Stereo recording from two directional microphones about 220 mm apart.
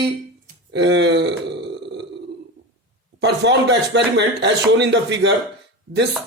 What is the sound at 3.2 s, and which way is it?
Speech, 50° right (ahead or behind).